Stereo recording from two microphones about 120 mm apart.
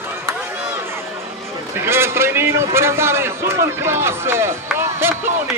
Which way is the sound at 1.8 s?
20° right (ahead or behind).